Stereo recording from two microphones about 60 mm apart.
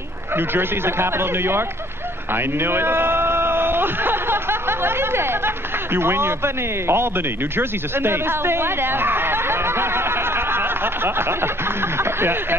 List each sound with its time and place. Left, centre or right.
0.4 s a man's voice: right